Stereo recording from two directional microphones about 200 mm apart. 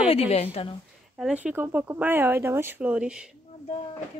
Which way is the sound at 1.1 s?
5° right (ahead or behind).